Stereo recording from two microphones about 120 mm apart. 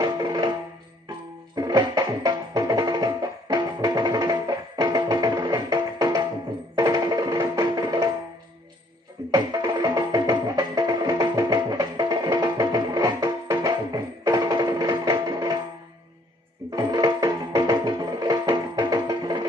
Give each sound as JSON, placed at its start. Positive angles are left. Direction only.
{"t": 0.0, "sound": "music", "side_deg": -35}
{"t": 1.5, "sound": "music", "side_deg": -35}
{"t": 9.3, "sound": "music", "side_deg": -35}
{"t": 16.7, "sound": "music", "side_deg": -35}